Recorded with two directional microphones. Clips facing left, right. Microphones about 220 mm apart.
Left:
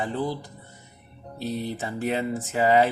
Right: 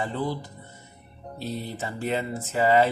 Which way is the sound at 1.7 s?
15° left (ahead or behind).